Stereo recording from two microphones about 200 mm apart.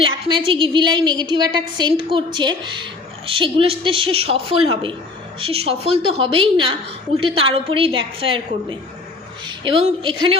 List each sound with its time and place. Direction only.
0.0 s a woman's voice: 25° right (ahead or behind)
9.5 s a woman's voice: 25° right (ahead or behind)